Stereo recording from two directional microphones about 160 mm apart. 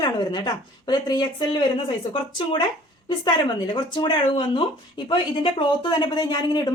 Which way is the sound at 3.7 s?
30° left (ahead or behind).